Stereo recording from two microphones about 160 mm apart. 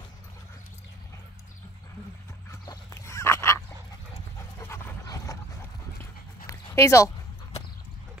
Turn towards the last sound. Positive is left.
turn(degrees=20)  # may be behind; listen again after turning